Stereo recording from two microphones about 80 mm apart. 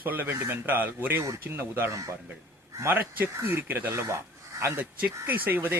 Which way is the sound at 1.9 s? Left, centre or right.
Right.